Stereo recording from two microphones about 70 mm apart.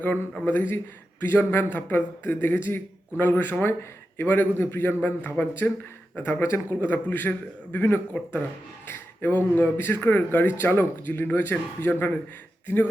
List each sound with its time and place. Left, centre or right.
0.0 s speech: left